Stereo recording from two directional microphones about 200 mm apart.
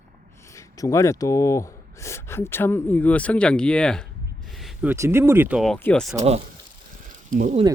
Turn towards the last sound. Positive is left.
turn(degrees=-35)  # may be behind; listen again after turning